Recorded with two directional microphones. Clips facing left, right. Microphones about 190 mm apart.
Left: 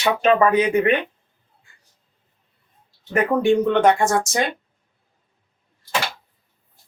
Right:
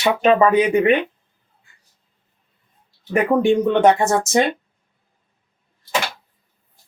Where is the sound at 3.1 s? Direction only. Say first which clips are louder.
Right 1 dB; 20° right (ahead or behind).